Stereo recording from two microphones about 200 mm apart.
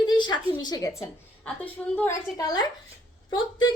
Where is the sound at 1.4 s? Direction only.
10° left (ahead or behind).